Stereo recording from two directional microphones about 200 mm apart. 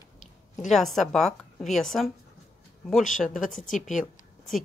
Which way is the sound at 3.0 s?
40° left (ahead or behind).